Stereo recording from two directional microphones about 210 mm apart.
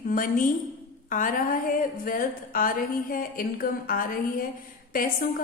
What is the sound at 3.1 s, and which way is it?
A woman's voice, 40° left (ahead or behind).